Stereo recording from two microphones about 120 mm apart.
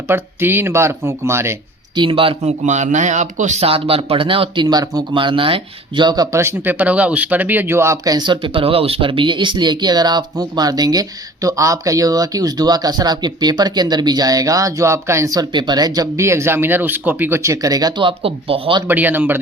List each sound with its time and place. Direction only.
0.1 s speech: 20° right (ahead or behind)
2.0 s speech: 50° right (ahead or behind)
2.5 s speech: 80° right
3.7 s speech: 50° right (ahead or behind)
6.3 s speech: 20° right (ahead or behind); by 18.8 s 50° right (ahead or behind)
18.9 s a man's voice: 15° right (ahead or behind)